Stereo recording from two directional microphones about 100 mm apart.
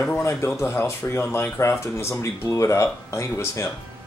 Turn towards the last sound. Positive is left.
turn(degrees=30)  # may be behind; listen again after turning